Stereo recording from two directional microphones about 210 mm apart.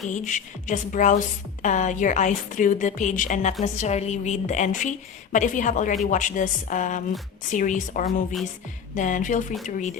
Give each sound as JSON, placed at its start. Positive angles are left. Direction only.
{"t": 0.1, "sound": "a woman's voice", "side_deg": 35}